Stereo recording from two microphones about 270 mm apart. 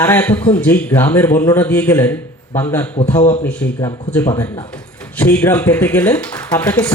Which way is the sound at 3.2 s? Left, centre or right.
Left.